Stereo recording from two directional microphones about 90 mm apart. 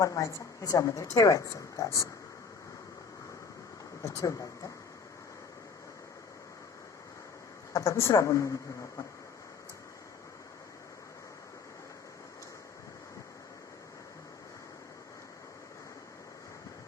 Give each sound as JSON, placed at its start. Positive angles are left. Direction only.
{"t": 0.0, "sound": "a woman's voice", "side_deg": 35}
{"t": 4.0, "sound": "a woman's voice", "side_deg": 35}
{"t": 7.7, "sound": "a woman's voice", "side_deg": 40}